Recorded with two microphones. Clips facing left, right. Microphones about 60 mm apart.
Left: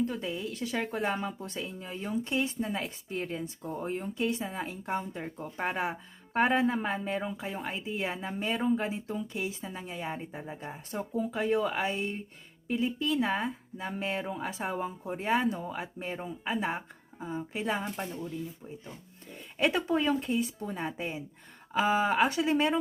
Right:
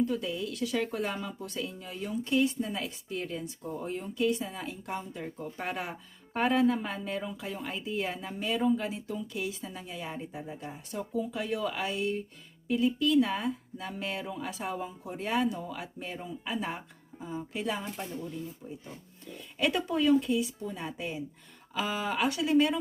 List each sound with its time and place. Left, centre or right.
0.1 s speech: left
19.5 s speech: left